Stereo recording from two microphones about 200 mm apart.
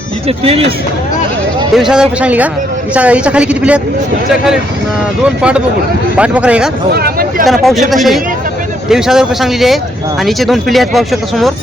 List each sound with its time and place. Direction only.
0.3 s speech: 30° right (ahead or behind)
1.7 s a woman's voice: 5° right (ahead or behind)
5.4 s speech: 5° right (ahead or behind)
6.9 s speech: 50° right (ahead or behind)
7.4 s speech: centre (ahead or behind)